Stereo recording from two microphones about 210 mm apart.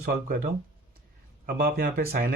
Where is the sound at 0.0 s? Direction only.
45° right (ahead or behind).